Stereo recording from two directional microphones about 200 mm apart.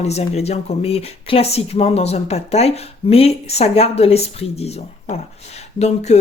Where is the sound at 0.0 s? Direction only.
30° left (ahead or behind).